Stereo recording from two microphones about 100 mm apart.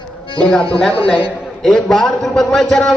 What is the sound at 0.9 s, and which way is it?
Speech, 65° left (ahead or behind).